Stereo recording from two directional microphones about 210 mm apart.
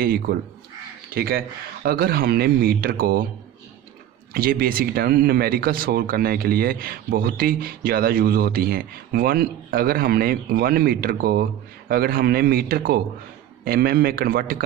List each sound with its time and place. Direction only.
0.0 s speech: 45° right (ahead or behind)
4.3 s speech: 45° right (ahead or behind)